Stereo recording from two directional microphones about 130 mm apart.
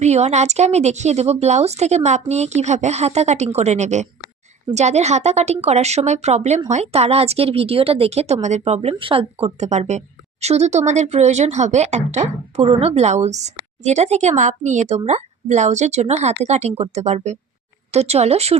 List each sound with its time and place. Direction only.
0.0 s speech: 60° right (ahead or behind)